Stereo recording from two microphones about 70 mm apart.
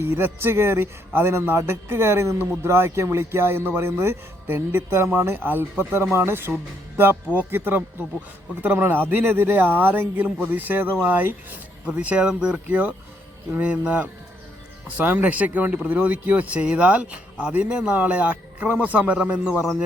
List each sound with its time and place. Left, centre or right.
0.0 s speech: right; by 19.6 s centre